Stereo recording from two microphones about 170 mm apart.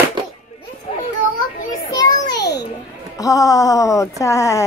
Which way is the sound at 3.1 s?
20° left (ahead or behind).